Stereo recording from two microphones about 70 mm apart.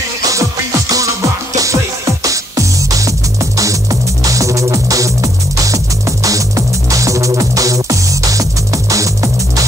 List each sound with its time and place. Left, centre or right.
0.3 s music: right